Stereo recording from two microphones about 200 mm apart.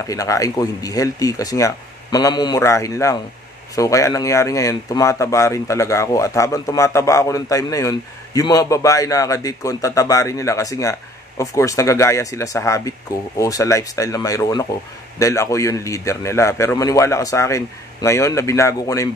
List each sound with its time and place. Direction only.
0.0 s speech: 15° left (ahead or behind)